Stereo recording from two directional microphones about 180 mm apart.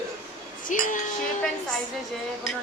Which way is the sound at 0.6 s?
45° left (ahead or behind).